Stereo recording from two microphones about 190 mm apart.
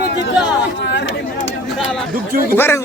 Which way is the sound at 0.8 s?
70° left (ahead or behind).